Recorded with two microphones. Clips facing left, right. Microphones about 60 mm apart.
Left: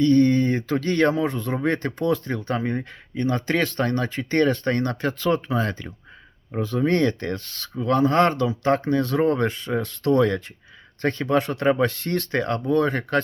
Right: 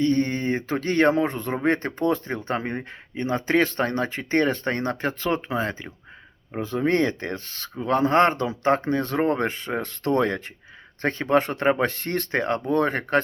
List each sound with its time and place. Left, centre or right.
0.0 s speech: right